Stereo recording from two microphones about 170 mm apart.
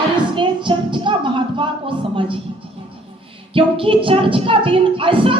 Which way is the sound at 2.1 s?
30° right (ahead or behind).